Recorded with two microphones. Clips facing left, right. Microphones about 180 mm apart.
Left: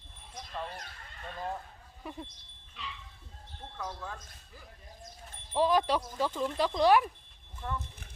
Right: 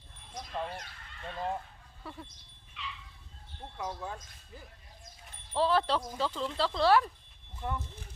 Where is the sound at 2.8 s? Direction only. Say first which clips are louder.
Even; 40° left (ahead or behind).